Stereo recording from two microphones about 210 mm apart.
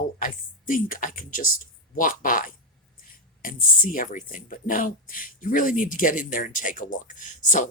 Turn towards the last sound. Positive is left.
turn(degrees=35)  # may be behind; listen again after turning